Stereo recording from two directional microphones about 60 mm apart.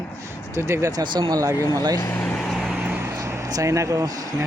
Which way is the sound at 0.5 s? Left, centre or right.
Right.